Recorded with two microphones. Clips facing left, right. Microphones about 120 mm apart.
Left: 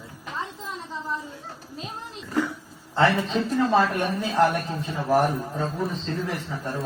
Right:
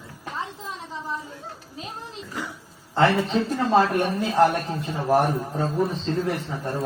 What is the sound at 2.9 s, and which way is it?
A woman's voice, 20° right (ahead or behind).